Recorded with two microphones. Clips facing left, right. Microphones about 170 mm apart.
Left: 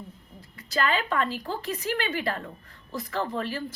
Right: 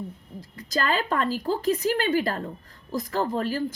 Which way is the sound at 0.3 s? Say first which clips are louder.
Right 1 dB; 40° right (ahead or behind).